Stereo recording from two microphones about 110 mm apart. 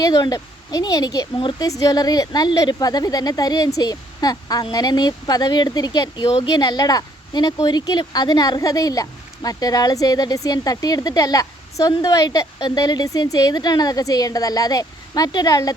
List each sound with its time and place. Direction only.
0.0 s speech: 35° left (ahead or behind)